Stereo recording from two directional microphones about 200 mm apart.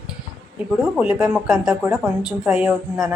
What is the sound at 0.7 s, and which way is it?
A woman's voice, 5° right (ahead or behind).